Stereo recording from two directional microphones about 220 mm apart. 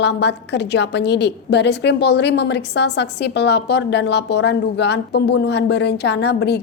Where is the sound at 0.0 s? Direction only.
50° left (ahead or behind).